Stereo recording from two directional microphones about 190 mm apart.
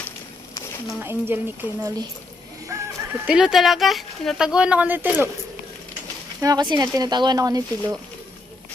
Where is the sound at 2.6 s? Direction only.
15° right (ahead or behind).